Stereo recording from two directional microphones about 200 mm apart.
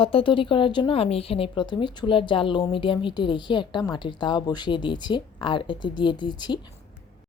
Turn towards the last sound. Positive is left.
turn(degrees=20)  # may be behind; listen again after turning